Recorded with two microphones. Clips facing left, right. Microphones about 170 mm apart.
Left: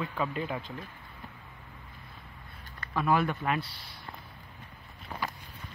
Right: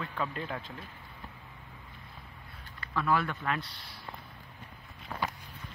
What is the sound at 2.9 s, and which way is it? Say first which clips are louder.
Speech: left 3 dB; 15° left (ahead or behind).